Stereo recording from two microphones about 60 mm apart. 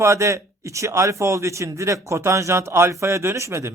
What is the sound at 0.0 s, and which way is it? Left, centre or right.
A man's voice, right.